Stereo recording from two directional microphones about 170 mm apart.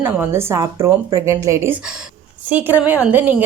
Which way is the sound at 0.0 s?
15° right (ahead or behind).